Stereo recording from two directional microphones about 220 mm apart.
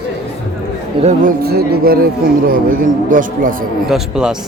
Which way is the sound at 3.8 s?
Centre (ahead or behind).